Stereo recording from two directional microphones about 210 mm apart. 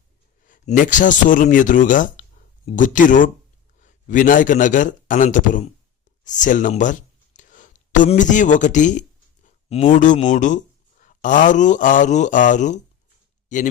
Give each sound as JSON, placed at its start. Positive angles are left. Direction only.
{"t": 0.4, "sound": "a man's voice", "side_deg": 40}